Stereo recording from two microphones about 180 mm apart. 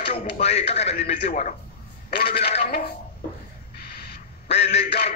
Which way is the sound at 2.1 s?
60° left (ahead or behind).